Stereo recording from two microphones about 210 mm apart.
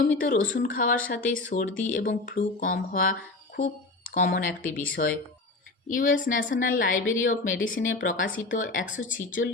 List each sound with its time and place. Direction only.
0.0 s speech: 40° left (ahead or behind)